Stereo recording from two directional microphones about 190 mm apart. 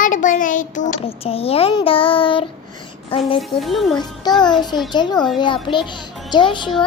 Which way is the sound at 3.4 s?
Centre (ahead or behind).